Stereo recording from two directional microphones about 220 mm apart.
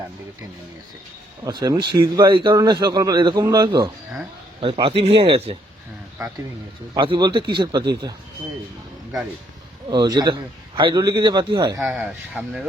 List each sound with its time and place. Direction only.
1.5 s speech: 15° right (ahead or behind)
6.9 s speech: 20° right (ahead or behind)
9.9 s speech: 20° right (ahead or behind)
11.8 s speech: 5° right (ahead or behind)